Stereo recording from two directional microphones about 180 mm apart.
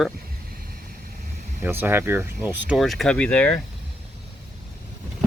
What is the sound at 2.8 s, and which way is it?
Speech, centre (ahead or behind).